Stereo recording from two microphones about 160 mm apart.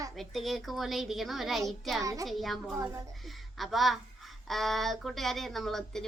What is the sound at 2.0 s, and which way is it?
Speech, 20° right (ahead or behind).